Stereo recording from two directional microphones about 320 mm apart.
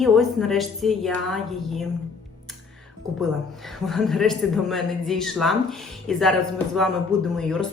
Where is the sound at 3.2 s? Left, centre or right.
Centre.